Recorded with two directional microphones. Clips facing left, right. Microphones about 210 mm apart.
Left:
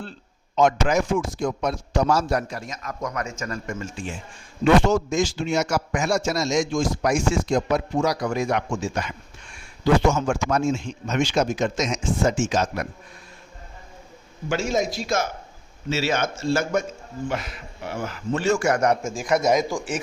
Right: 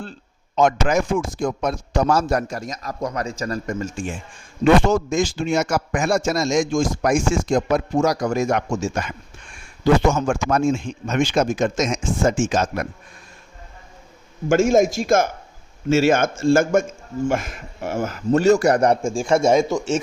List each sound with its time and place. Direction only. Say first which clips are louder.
0.5 s a man's voice: right 2 dB; 50° right (ahead or behind)
14.5 s a man's voice: right 8 dB; 50° right (ahead or behind); by 20.0 s 25° right (ahead or behind)